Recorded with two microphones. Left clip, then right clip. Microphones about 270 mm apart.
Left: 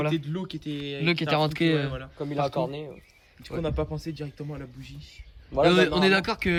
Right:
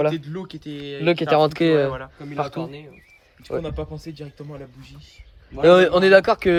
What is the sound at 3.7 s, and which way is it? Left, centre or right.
Speech, centre.